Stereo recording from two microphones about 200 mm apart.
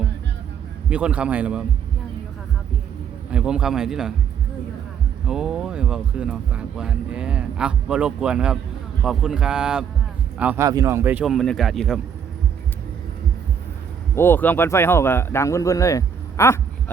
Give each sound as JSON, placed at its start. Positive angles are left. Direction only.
{"t": 0.9, "sound": "speech", "side_deg": -5}
{"t": 3.3, "sound": "speech", "side_deg": -5}
{"t": 5.2, "sound": "speech", "side_deg": -5}
{"t": 14.2, "sound": "speech", "side_deg": 10}